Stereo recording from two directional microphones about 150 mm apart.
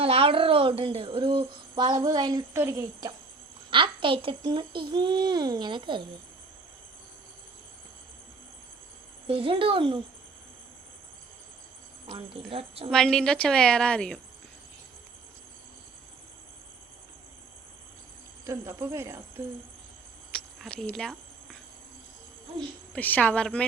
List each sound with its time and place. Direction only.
0.0 s speech: 40° right (ahead or behind); by 3.1 s 20° right (ahead or behind)
3.7 s speech: 35° right (ahead or behind)
9.2 s speech: 40° right (ahead or behind)
12.1 s speech: 40° right (ahead or behind)
12.9 s a woman's voice: 5° left (ahead or behind)
18.4 s speech: 20° right (ahead or behind)
20.3 s a sound: 5° left (ahead or behind)
22.9 s speech: 10° left (ahead or behind)